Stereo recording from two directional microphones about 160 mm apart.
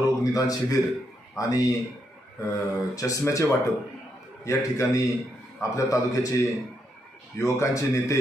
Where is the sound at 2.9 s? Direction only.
20° left (ahead or behind).